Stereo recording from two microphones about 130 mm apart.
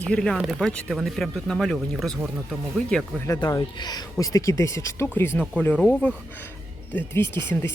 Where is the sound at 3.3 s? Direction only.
30° left (ahead or behind).